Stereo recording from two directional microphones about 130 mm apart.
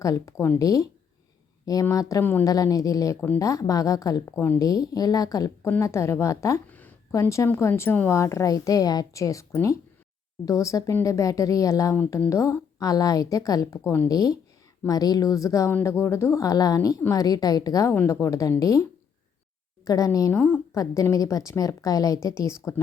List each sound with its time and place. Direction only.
0.0 s a woman's voice: 25° left (ahead or behind)
7.1 s a woman's voice: 25° left (ahead or behind)